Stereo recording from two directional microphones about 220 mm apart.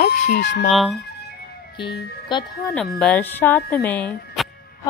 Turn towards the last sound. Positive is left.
turn(degrees=5)  # may be behind; listen again after turning